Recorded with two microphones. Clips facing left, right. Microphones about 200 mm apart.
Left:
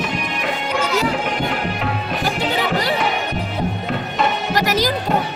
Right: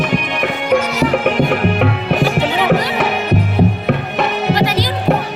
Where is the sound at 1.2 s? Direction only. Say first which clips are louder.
Right 8 dB; 65° right (ahead or behind).